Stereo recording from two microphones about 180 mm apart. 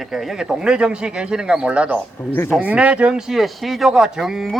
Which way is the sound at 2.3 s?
10° left (ahead or behind).